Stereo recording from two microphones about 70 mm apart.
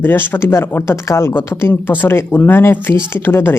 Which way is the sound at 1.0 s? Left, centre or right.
Left.